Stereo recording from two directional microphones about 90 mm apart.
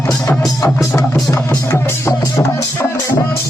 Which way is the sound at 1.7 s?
30° left (ahead or behind).